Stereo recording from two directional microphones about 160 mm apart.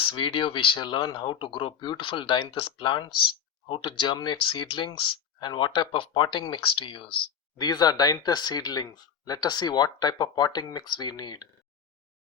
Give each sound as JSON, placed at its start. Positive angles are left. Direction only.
{"t": 0.0, "sound": "speech", "side_deg": 30}